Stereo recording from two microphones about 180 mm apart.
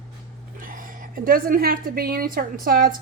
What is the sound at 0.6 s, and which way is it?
A woman's voice, 50° right (ahead or behind).